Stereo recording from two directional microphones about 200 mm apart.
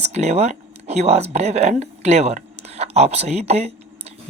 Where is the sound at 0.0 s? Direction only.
35° right (ahead or behind).